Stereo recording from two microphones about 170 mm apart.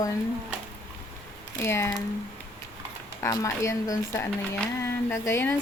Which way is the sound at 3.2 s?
20° left (ahead or behind).